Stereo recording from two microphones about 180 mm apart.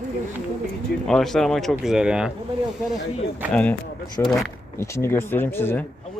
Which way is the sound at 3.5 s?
5° left (ahead or behind).